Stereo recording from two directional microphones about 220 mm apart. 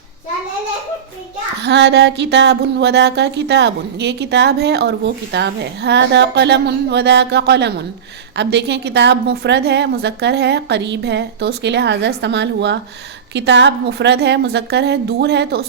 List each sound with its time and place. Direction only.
1.6 s speech: 50° right (ahead or behind)